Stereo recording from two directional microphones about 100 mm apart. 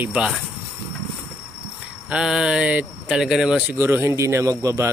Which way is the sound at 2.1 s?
5° right (ahead or behind).